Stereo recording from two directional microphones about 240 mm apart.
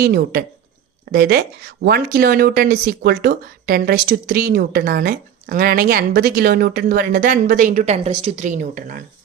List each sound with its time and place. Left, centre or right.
0.0 s speech: right